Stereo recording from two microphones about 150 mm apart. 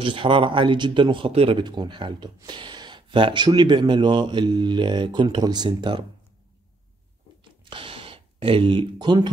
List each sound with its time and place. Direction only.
0.0 s speech: 35° right (ahead or behind)
1.6 s speech: 30° right (ahead or behind)
7.7 s speech: 35° right (ahead or behind)